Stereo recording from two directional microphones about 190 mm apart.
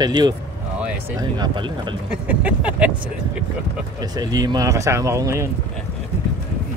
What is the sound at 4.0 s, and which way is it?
Speech, 20° right (ahead or behind).